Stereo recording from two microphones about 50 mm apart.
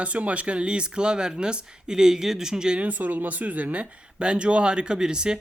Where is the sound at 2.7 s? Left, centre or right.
Right.